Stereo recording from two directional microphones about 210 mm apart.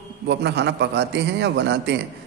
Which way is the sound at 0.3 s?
55° right (ahead or behind).